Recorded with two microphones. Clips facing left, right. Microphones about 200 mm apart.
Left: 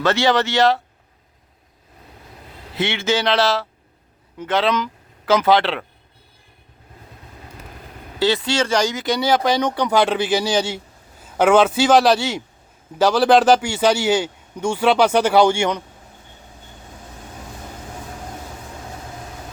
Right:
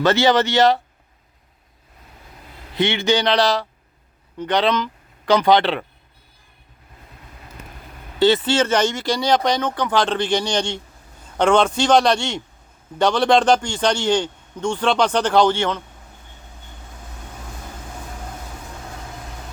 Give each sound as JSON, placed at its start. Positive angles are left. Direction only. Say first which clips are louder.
{"t": 0.0, "sound": "speech", "louder": "right 2 dB", "side_deg": 0}
{"t": 2.7, "sound": "speech", "louder": "right 2 dB", "side_deg": 0}
{"t": 8.2, "sound": "a man's voice", "louder": "right 3 dB", "side_deg": 0}